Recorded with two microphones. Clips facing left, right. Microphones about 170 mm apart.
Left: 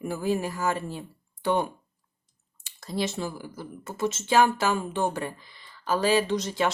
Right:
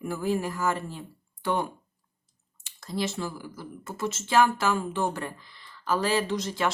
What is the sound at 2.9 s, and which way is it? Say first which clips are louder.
Speech: left 1 dB; 20° left (ahead or behind).